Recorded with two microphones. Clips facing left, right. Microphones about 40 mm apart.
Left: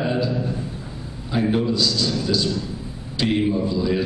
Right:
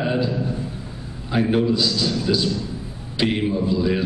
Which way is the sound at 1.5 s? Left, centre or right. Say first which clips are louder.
Right 2 dB; centre.